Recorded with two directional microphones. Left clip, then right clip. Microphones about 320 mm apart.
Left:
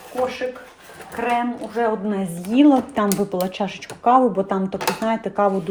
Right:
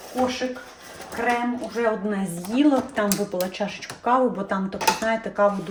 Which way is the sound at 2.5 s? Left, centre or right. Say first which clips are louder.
Left 5 dB; centre.